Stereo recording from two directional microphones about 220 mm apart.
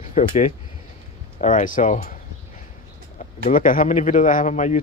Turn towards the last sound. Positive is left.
turn(degrees=35)  # may be behind; listen again after turning